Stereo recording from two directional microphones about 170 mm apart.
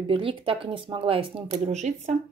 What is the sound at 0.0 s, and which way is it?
Speech, 30° right (ahead or behind).